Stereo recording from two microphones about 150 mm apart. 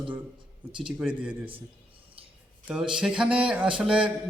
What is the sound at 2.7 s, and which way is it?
Speech, 5° right (ahead or behind).